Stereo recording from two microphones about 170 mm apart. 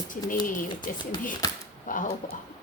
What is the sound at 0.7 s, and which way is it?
Speech, 25° left (ahead or behind).